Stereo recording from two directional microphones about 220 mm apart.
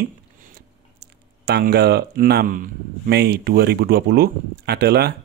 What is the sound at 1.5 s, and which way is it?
Speech, 45° right (ahead or behind).